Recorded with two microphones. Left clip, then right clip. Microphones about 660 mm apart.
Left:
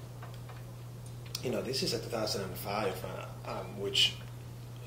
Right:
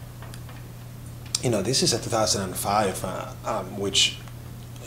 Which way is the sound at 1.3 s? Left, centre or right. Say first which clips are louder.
Right 10 dB; right.